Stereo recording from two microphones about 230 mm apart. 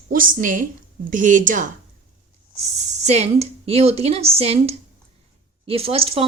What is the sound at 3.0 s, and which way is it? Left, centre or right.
Speech, right.